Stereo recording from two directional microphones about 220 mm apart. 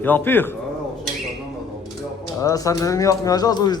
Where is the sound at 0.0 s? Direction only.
10° left (ahead or behind).